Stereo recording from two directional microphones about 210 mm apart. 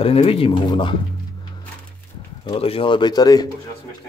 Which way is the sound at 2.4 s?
25° left (ahead or behind).